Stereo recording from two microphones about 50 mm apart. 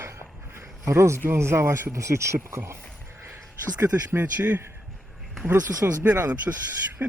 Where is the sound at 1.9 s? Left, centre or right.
Right.